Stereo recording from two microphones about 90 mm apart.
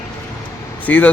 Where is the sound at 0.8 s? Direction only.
15° left (ahead or behind).